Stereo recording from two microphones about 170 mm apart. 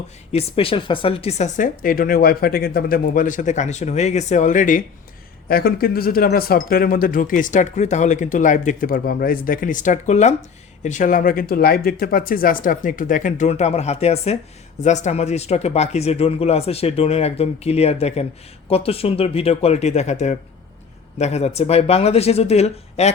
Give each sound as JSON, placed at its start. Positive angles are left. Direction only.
{"t": 0.3, "sound": "speech", "side_deg": 35}
{"t": 5.5, "sound": "speech", "side_deg": 65}